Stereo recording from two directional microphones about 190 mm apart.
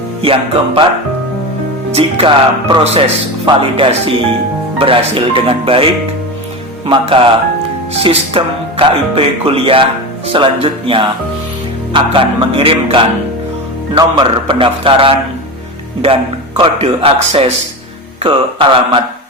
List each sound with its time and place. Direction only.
0.2 s music: 30° right (ahead or behind)
1.9 s music: 30° right (ahead or behind)
16.6 s music: 30° right (ahead or behind)